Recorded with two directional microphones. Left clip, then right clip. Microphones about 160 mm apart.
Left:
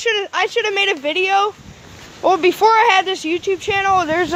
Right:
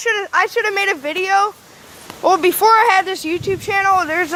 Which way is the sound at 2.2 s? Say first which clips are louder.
Even; 5° left (ahead or behind).